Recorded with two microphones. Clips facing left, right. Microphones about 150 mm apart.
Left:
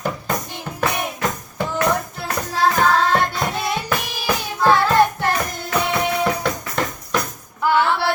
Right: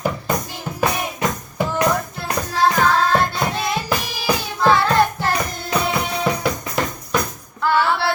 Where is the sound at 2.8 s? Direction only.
Centre (ahead or behind).